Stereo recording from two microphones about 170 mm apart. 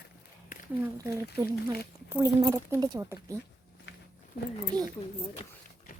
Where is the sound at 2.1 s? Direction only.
20° right (ahead or behind).